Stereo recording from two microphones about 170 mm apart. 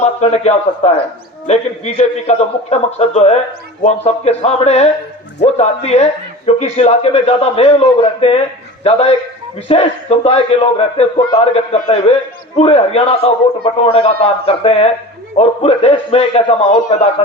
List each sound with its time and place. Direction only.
0.0 s a man's voice: 40° left (ahead or behind)